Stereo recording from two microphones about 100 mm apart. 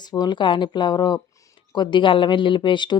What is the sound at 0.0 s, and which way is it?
A woman's voice, 45° left (ahead or behind).